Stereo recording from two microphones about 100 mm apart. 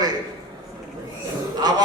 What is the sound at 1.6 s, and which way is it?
Speech, 45° right (ahead or behind).